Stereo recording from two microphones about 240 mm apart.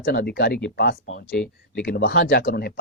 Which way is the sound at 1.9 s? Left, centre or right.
Left.